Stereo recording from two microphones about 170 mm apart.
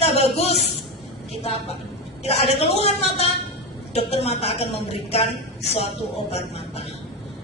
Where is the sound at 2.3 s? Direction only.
40° left (ahead or behind).